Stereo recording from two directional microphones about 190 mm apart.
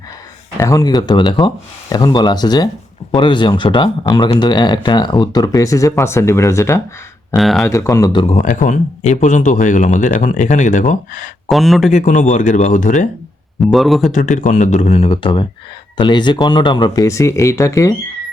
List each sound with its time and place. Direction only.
0.5 s speech: 20° left (ahead or behind)
7.3 s speech: centre (ahead or behind)
7.6 s speech: 15° left (ahead or behind)
8.4 s speech: 45° left (ahead or behind)
11.4 s speech: centre (ahead or behind)
11.9 s speech: 40° left (ahead or behind)
13.7 s speech: centre (ahead or behind)
14.1 s speech: 40° left (ahead or behind); by 17.9 s 15° left (ahead or behind)